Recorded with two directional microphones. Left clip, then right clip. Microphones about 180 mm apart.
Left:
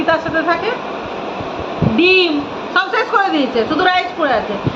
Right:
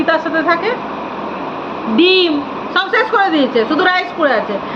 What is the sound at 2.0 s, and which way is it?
A woman's voice, 15° right (ahead or behind).